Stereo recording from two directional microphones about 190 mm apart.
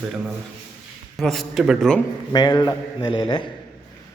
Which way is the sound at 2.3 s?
20° left (ahead or behind).